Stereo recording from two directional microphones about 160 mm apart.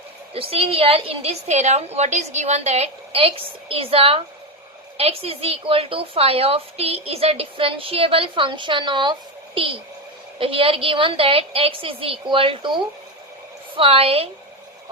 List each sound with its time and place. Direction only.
0.3 s a woman's voice: 35° right (ahead or behind)
10.3 s a woman's voice: 35° right (ahead or behind)